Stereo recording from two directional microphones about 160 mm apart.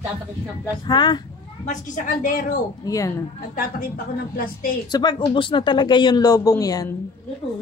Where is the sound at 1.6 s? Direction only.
55° left (ahead or behind).